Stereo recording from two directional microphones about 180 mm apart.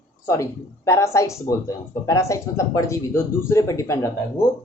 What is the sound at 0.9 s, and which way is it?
Speech, 15° left (ahead or behind).